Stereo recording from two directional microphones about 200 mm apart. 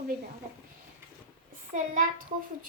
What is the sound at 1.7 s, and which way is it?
Speech, 40° right (ahead or behind).